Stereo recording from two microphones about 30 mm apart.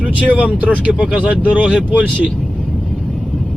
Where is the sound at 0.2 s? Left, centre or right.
Right.